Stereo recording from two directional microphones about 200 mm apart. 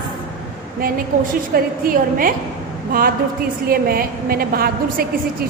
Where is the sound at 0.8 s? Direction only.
45° right (ahead or behind).